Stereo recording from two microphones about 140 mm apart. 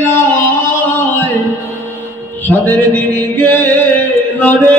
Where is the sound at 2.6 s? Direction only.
10° left (ahead or behind).